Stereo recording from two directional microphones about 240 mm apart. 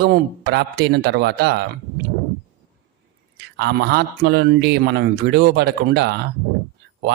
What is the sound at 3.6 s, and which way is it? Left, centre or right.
Speech, right.